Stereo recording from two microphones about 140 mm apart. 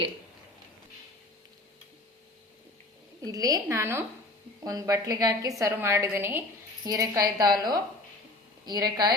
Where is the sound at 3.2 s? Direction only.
25° right (ahead or behind).